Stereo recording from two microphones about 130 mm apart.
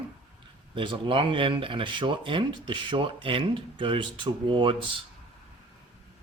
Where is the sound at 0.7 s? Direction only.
40° right (ahead or behind).